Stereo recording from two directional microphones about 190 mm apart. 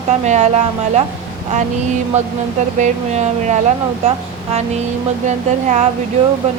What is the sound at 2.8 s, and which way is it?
Speech, 40° right (ahead or behind).